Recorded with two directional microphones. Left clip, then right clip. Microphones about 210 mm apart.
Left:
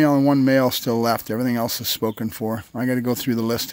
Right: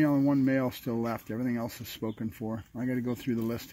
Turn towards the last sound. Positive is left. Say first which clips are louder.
# left 10 dB
turn(degrees=25)  # may be behind; listen again after turning